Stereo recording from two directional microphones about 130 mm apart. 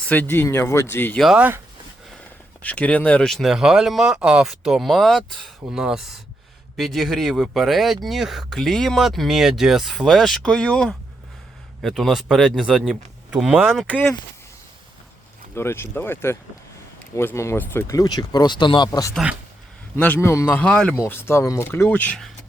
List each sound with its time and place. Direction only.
0.0 s speech: 15° left (ahead or behind)
1.4 s speech: 15° right (ahead or behind)
2.6 s speech: 10° left (ahead or behind); by 13.7 s 10° right (ahead or behind)
13.7 s speech: 10° left (ahead or behind)
15.5 s speech: 20° left (ahead or behind); by 18.9 s 35° left (ahead or behind)
18.9 s speech: 25° left (ahead or behind)
19.1 s speech: 5° right (ahead or behind)
20.0 s speech: 15° left (ahead or behind)
20.9 s speech: 20° left (ahead or behind)